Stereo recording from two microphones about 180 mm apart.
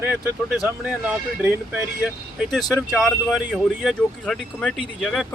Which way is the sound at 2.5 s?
Centre (ahead or behind).